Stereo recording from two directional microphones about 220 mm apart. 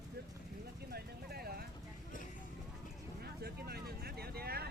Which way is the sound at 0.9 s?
45° right (ahead or behind).